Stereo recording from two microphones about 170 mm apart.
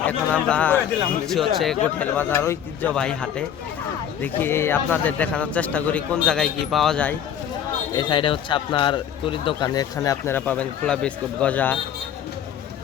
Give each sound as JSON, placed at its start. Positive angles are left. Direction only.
{"t": 0.0, "sound": "a man's voice", "side_deg": 10}
{"t": 7.9, "sound": "speech", "side_deg": 30}
{"t": 9.6, "sound": "a man's voice", "side_deg": 20}